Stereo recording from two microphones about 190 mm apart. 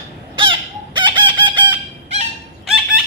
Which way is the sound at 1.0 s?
25° right (ahead or behind).